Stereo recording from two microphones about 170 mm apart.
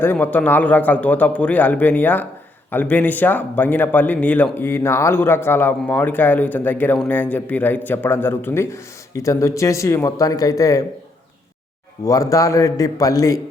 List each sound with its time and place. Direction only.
0.0 s speech: 10° left (ahead or behind)
12.0 s a man's voice: 20° left (ahead or behind)